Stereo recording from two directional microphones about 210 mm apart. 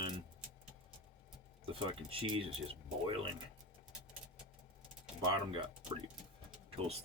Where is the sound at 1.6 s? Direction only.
25° right (ahead or behind).